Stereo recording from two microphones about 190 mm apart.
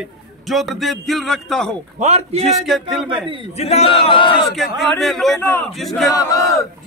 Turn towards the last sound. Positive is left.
turn(degrees=20)  # may be behind; listen again after turning